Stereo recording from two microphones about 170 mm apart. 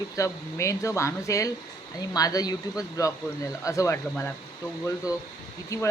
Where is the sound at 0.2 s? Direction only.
15° left (ahead or behind).